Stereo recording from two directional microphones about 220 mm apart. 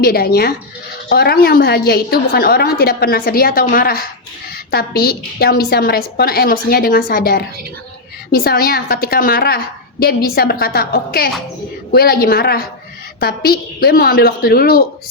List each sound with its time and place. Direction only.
0.0 s a woman's voice: 45° left (ahead or behind)